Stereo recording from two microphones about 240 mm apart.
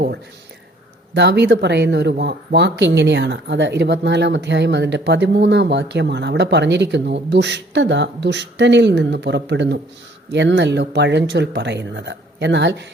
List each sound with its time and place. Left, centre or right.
1.1 s speech: right